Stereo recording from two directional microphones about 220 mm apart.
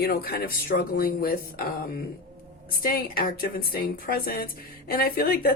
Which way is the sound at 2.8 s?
40° left (ahead or behind).